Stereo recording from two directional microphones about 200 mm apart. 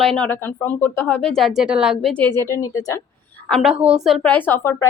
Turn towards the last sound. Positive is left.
turn(degrees=10)  # may be behind; listen again after turning